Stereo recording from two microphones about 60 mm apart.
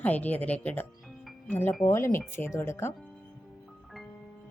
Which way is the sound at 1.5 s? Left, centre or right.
Left.